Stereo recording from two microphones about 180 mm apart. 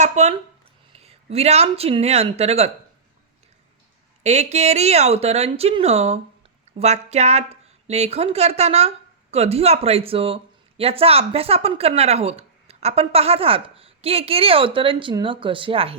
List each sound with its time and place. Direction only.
0.0 s speech: 40° right (ahead or behind)
4.2 s speech: 40° right (ahead or behind)